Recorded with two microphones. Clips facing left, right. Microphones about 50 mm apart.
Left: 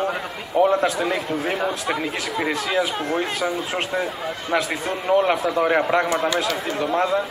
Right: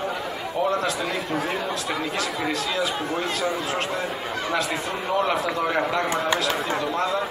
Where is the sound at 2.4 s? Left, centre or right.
Left.